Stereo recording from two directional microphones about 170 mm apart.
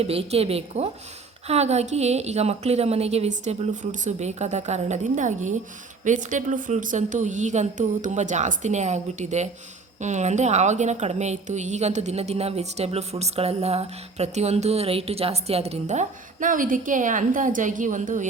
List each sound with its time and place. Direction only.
0.0 s a woman's voice: 35° right (ahead or behind)